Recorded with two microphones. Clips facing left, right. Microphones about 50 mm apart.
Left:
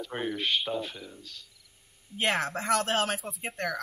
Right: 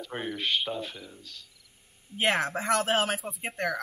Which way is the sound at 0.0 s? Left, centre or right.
Centre.